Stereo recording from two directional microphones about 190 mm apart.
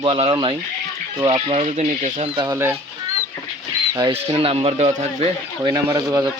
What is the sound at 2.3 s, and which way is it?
Speech, 25° right (ahead or behind).